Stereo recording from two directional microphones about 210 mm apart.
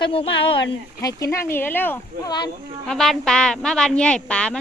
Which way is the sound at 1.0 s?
15° left (ahead or behind).